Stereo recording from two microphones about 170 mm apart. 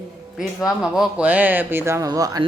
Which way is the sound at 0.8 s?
5° right (ahead or behind).